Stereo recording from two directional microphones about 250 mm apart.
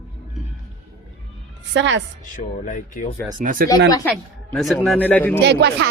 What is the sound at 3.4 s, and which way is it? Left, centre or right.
Speech, right.